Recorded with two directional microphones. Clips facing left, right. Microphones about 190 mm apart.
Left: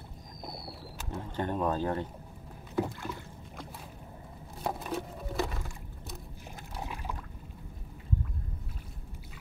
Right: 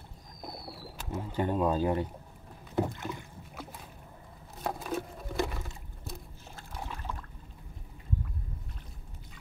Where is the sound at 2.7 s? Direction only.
20° right (ahead or behind).